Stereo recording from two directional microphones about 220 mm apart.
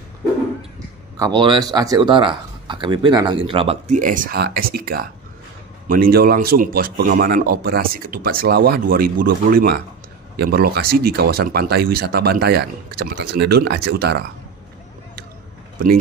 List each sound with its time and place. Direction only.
1.2 s speech: 20° right (ahead or behind); by 14.2 s 45° right (ahead or behind)